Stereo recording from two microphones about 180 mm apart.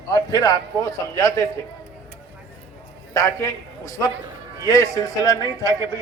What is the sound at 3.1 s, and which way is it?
A man's voice, 15° left (ahead or behind).